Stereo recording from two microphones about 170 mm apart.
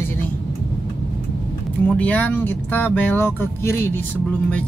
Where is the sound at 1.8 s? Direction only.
10° left (ahead or behind).